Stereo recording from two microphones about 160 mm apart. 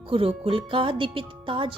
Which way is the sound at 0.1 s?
35° right (ahead or behind).